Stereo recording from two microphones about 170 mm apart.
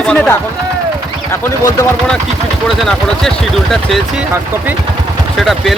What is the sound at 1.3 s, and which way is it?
Speech, 15° left (ahead or behind).